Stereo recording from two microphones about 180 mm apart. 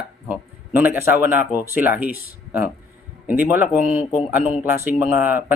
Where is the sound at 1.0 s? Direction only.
55° left (ahead or behind).